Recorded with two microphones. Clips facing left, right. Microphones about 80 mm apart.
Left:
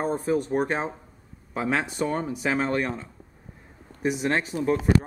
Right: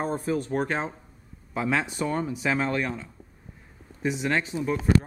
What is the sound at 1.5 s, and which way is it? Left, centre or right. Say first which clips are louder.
Speech: even; left.